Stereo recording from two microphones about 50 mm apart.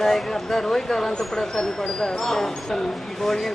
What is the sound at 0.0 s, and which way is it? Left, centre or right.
Speech, centre.